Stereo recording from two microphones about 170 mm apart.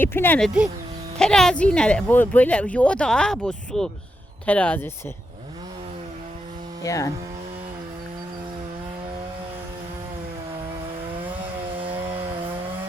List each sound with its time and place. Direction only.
0.0 s speech: 10° left (ahead or behind)
6.8 s speech: 20° left (ahead or behind)